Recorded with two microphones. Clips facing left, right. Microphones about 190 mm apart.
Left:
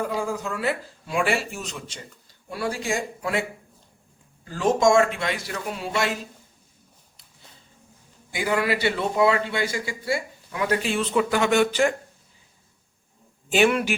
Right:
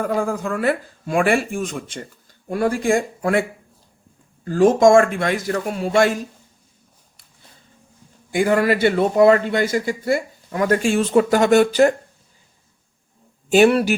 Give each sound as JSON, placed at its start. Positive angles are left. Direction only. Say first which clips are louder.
{"t": 0.0, "sound": "a man's voice", "louder": "right 5 dB", "side_deg": -55}
{"t": 4.4, "sound": "a man's voice", "louder": "right 7 dB", "side_deg": -50}
{"t": 8.3, "sound": "a man's voice", "louder": "right 7 dB", "side_deg": -50}
{"t": 13.5, "sound": "a man's voice", "louder": "right 6 dB", "side_deg": -35}